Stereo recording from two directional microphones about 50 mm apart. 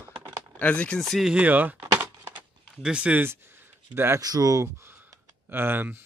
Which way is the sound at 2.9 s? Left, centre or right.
Right.